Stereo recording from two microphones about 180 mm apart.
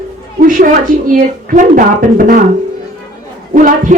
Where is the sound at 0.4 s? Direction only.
50° right (ahead or behind).